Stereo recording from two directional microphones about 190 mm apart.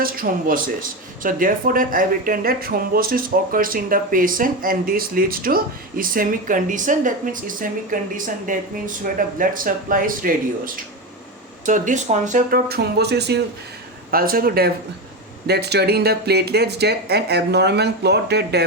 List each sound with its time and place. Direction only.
0.0 s speech: 50° right (ahead or behind)
11.6 s speech: 45° right (ahead or behind); by 13.4 s 60° right (ahead or behind)
14.1 s speech: 50° right (ahead or behind)